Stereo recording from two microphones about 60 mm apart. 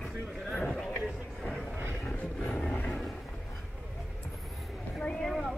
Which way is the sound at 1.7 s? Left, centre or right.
Right.